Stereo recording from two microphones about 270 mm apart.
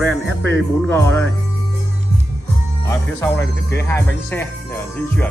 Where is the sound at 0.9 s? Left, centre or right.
Centre.